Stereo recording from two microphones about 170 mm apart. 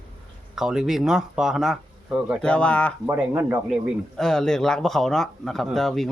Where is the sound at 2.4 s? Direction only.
5° left (ahead or behind).